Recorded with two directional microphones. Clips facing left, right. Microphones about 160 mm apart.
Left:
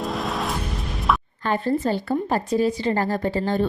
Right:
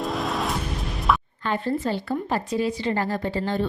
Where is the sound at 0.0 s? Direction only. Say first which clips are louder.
Even; centre (ahead or behind).